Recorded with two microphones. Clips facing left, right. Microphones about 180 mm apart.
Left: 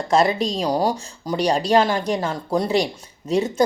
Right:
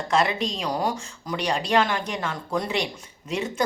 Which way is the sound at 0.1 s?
40° left (ahead or behind).